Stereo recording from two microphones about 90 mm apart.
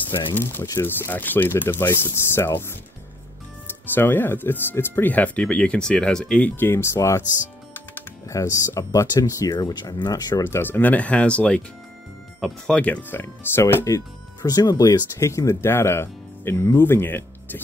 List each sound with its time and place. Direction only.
0.3 s speech: 25° left (ahead or behind)
8.3 s speech: 35° left (ahead or behind)
10.4 s speech: 25° left (ahead or behind)
13.8 s speech: 40° left (ahead or behind); by 17.6 s 25° left (ahead or behind)